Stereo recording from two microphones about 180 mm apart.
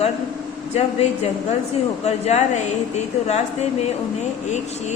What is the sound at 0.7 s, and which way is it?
Speech, 35° left (ahead or behind).